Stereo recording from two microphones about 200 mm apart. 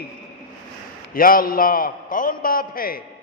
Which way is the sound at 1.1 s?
45° left (ahead or behind).